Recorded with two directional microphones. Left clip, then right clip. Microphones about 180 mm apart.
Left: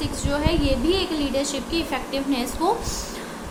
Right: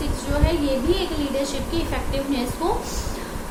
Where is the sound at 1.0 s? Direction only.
50° left (ahead or behind).